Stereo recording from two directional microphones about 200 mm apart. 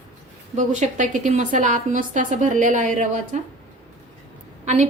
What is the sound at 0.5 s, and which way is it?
A woman's voice, 40° right (ahead or behind).